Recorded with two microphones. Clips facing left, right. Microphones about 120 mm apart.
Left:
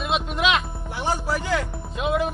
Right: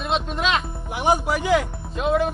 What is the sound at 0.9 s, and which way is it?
Speech, 15° right (ahead or behind).